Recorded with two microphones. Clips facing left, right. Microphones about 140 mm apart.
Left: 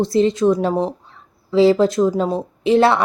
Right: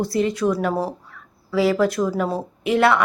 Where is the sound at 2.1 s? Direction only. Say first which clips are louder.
Left 3 dB; 25° left (ahead or behind).